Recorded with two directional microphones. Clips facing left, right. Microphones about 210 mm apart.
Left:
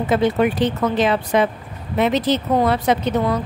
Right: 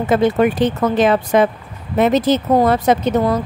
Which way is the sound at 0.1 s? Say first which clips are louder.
Right 3 dB; 45° right (ahead or behind).